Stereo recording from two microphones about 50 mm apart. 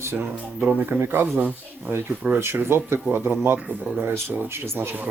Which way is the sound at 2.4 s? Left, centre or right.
Right.